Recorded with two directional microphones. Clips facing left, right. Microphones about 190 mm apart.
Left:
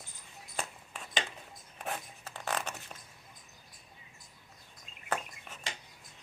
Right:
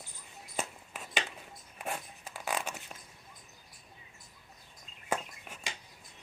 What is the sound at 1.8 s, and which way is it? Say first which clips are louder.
Zipper: even; 10° right (ahead or behind).